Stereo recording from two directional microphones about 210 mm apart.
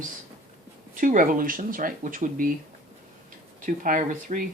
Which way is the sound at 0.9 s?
40° right (ahead or behind).